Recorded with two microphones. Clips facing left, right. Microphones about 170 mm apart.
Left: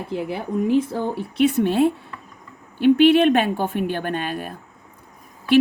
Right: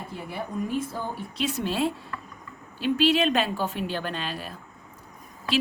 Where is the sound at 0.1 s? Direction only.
80° left.